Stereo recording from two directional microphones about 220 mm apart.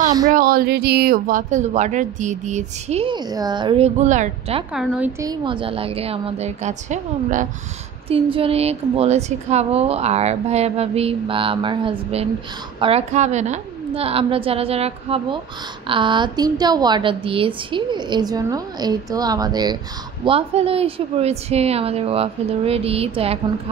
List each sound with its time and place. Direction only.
0.0 s a sound: 15° right (ahead or behind)
0.3 s speech: 40° right (ahead or behind)
4.7 s a woman's voice: 5° right (ahead or behind)
5.2 s a woman's voice: 20° right (ahead or behind)